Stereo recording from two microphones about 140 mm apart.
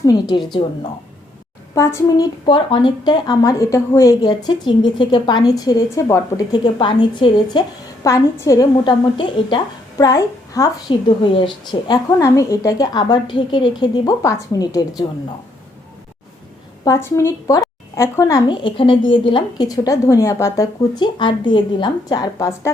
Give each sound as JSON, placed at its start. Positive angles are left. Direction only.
{"t": 0.0, "sound": "a woman's voice", "side_deg": 30}
{"t": 1.7, "sound": "a woman's voice", "side_deg": 20}
{"t": 2.5, "sound": "a woman's voice", "side_deg": 35}
{"t": 8.8, "sound": "a woman's voice", "side_deg": 35}
{"t": 12.2, "sound": "a woman's voice", "side_deg": 20}
{"t": 16.8, "sound": "a woman's voice", "side_deg": 20}
{"t": 18.4, "sound": "a woman's voice", "side_deg": 35}